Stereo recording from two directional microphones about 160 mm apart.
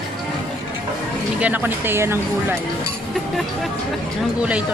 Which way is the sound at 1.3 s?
10° right (ahead or behind).